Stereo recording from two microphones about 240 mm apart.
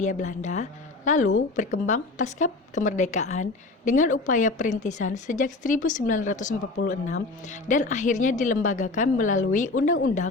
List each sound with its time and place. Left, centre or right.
0.0 s a woman's voice: left